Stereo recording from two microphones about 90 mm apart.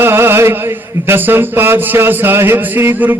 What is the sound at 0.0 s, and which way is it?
Chant, 25° right (ahead or behind).